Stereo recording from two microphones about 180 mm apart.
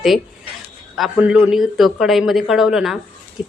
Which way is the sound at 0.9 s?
5° right (ahead or behind).